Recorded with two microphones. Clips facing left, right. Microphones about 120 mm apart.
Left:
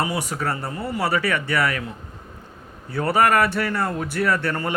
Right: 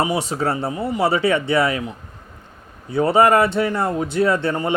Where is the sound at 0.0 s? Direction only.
25° right (ahead or behind).